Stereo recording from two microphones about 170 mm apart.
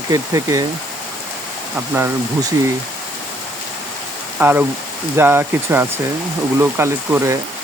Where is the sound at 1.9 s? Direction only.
10° right (ahead or behind).